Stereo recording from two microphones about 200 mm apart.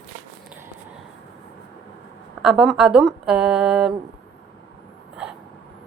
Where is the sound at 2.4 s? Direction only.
5° right (ahead or behind).